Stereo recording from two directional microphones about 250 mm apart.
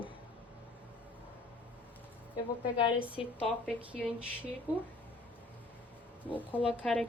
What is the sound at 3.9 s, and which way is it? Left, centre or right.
Speech, centre.